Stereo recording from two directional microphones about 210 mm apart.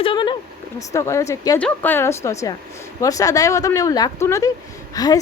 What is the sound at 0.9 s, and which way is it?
A woman's voice, 15° left (ahead or behind).